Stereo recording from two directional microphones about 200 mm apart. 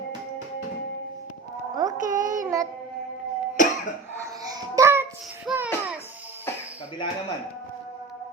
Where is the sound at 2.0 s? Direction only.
40° right (ahead or behind).